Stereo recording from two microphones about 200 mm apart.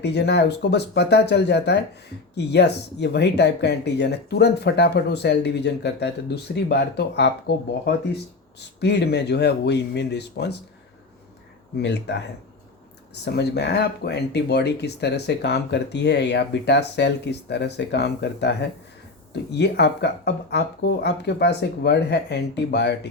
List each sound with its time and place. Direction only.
0.0 s speech: 55° left (ahead or behind)
11.8 s speech: 60° left (ahead or behind)
13.2 s speech: 55° left (ahead or behind)